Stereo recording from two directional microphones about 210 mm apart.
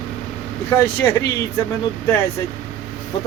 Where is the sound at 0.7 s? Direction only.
10° left (ahead or behind).